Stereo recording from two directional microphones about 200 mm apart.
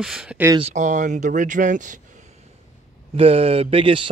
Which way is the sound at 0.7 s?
40° right (ahead or behind).